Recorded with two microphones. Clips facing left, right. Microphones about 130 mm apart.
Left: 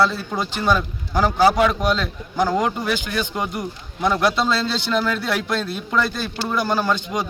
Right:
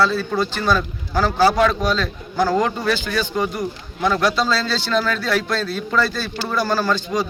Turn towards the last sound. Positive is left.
turn(degrees=20)  # may be behind; listen again after turning